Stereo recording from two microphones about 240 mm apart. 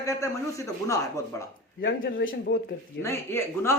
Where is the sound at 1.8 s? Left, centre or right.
Left.